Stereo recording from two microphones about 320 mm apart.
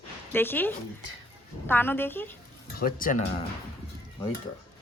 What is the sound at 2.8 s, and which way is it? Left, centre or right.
Speech, left.